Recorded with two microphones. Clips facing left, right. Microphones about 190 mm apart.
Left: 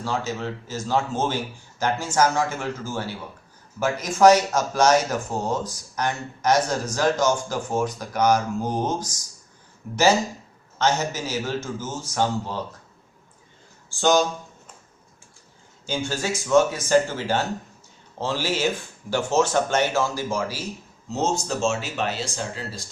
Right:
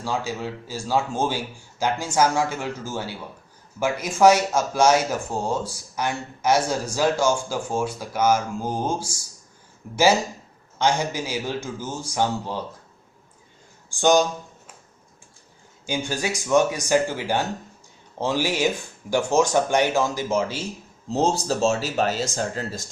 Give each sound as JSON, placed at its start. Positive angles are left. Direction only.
{"t": 0.0, "sound": "speech", "side_deg": -10}
{"t": 13.9, "sound": "speech", "side_deg": -15}
{"t": 15.9, "sound": "speech", "side_deg": -15}
{"t": 21.1, "sound": "speech", "side_deg": -35}